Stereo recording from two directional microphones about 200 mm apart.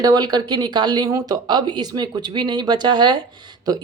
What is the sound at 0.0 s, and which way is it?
Speech, 20° right (ahead or behind).